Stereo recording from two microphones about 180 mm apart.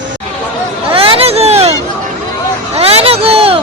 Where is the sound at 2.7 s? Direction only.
35° right (ahead or behind).